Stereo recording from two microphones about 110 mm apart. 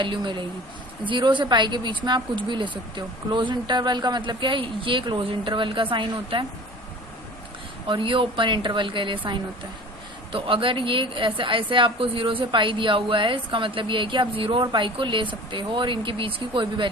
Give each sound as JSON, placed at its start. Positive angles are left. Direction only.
{"t": 0.0, "sound": "a woman's voice", "side_deg": -45}
{"t": 7.9, "sound": "a woman's voice", "side_deg": -50}